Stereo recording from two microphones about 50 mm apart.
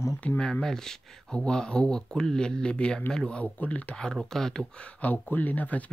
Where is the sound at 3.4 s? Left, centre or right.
Left.